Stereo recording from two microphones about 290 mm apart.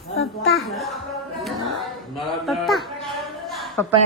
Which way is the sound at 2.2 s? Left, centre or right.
Centre.